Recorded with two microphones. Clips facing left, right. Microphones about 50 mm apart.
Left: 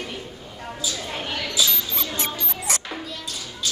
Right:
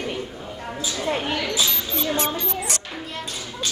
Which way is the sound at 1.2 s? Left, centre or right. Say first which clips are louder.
Right 3 dB; centre.